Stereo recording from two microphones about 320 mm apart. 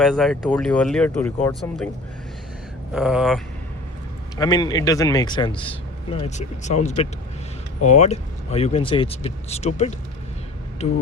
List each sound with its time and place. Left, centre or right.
0.0 s speech: centre
2.9 s speech: centre
4.4 s speech: centre